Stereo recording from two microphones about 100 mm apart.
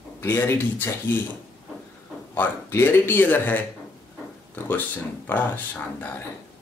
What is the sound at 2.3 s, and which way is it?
Speech, 25° left (ahead or behind).